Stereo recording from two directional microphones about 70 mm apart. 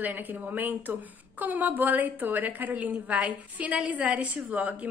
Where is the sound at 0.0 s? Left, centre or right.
Right.